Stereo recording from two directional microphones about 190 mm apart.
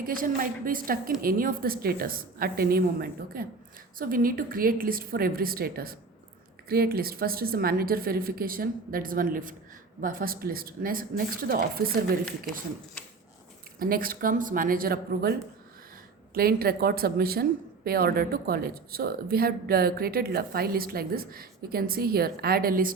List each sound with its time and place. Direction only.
0.0 s speech: 50° right (ahead or behind)
13.7 s speech: 50° right (ahead or behind)